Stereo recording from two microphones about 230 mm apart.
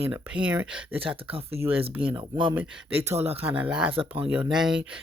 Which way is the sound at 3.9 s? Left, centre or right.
Right.